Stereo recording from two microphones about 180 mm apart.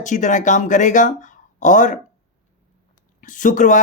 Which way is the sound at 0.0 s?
45° left (ahead or behind).